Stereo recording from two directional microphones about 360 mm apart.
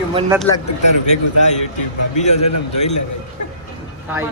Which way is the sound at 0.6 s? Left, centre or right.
Left.